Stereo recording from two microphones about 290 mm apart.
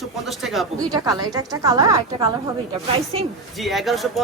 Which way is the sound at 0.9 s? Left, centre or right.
Centre.